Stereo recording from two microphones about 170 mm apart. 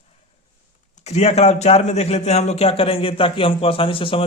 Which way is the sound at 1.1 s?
40° left (ahead or behind).